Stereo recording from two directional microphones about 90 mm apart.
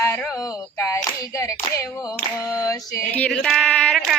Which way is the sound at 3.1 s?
15° left (ahead or behind).